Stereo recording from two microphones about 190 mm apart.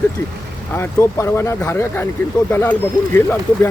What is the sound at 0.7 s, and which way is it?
Speech, 15° left (ahead or behind).